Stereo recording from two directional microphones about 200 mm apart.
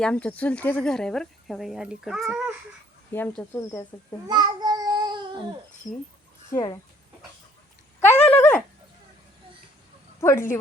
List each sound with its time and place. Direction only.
0.0 s speech: 5° left (ahead or behind)
3.1 s speech: 10° left (ahead or behind)
4.3 s child singing: 20° right (ahead or behind)
6.5 s speech: 20° left (ahead or behind)
8.0 s a sound: 10° left (ahead or behind)
10.2 s speech: 15° left (ahead or behind)